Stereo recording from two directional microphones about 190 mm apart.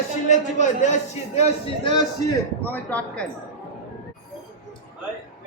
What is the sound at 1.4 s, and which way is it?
Speech, 30° left (ahead or behind).